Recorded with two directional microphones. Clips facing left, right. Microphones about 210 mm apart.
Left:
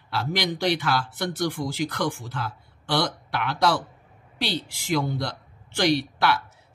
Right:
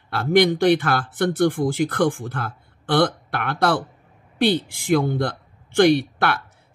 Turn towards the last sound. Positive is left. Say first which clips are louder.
# right 4 dB
turn(degrees=-55)  # may be behind; listen again after turning